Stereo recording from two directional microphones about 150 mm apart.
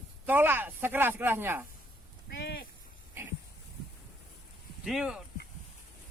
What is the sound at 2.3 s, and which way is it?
Speech, 90° left.